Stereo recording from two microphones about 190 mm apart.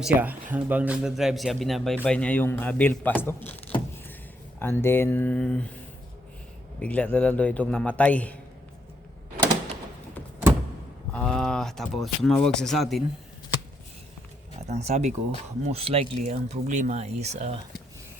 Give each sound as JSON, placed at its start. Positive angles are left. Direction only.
{"t": 0.0, "sound": "a man's voice", "side_deg": -5}
{"t": 4.6, "sound": "a man's voice", "side_deg": 10}
{"t": 11.1, "sound": "speech", "side_deg": 5}
{"t": 14.7, "sound": "speech", "side_deg": -35}